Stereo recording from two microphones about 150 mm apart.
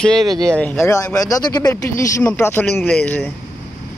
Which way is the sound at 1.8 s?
15° left (ahead or behind).